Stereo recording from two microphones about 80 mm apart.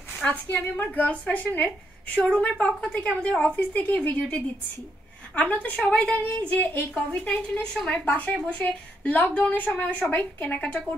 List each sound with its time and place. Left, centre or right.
0.2 s a woman's voice: centre